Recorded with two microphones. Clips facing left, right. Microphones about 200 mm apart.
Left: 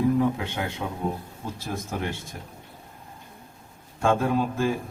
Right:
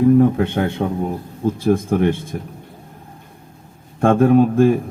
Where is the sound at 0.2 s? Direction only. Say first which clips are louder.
Right 10 dB; 55° right (ahead or behind).